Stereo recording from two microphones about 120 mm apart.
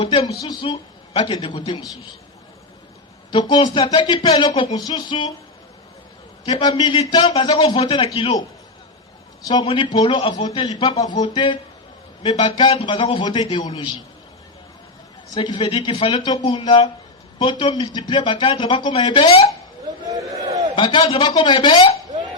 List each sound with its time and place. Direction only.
0.0 s speech: 55° left (ahead or behind)
0.4 s a man's voice: 40° left (ahead or behind)
3.3 s speech: 35° left (ahead or behind)
6.4 s speech: 35° left (ahead or behind)
8.0 s a man's voice: 55° left (ahead or behind)
9.6 s a man's voice: 45° left (ahead or behind)
13.1 s speech: 35° left (ahead or behind)
15.4 s speech: 45° left (ahead or behind)
20.1 s a sound: 30° right (ahead or behind)
20.7 s speech: 40° left (ahead or behind)